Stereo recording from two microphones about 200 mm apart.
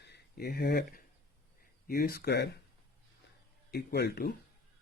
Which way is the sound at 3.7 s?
50° left (ahead or behind).